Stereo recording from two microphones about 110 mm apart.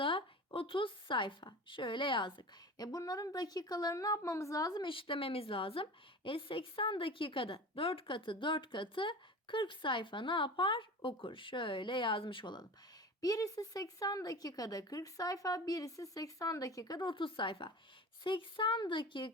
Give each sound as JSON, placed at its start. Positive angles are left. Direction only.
{"t": 0.0, "sound": "a woman's voice", "side_deg": 50}
{"t": 4.8, "sound": "a woman's voice", "side_deg": 50}
{"t": 13.2, "sound": "a woman's voice", "side_deg": 35}